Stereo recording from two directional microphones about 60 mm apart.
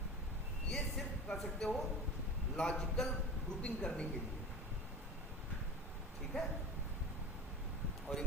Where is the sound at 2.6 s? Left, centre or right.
Centre.